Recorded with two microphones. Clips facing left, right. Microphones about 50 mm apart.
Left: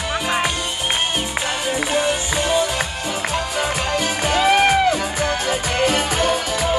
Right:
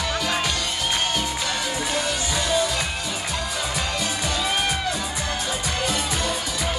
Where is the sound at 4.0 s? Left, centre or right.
Left.